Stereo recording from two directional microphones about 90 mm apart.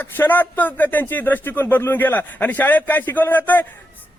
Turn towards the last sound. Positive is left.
turn(degrees=20)  # may be behind; listen again after turning